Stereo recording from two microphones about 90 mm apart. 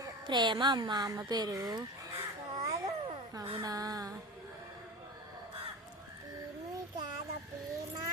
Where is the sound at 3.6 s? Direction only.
45° right (ahead or behind).